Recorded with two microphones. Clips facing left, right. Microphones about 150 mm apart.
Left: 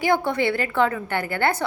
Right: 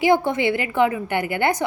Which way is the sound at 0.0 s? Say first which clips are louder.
Right 3 dB; 20° right (ahead or behind).